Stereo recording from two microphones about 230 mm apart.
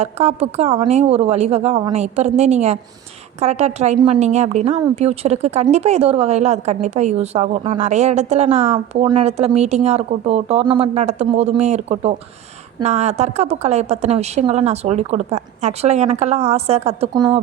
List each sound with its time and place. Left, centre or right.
0.0 s a woman's voice: right